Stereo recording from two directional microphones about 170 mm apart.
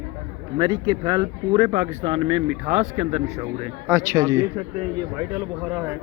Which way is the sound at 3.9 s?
15° right (ahead or behind).